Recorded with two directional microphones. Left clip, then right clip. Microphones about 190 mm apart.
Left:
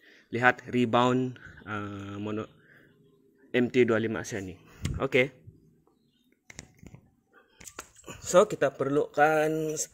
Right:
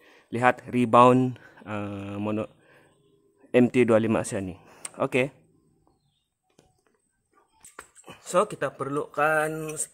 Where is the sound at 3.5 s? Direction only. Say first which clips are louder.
Right 4 dB; 25° right (ahead or behind).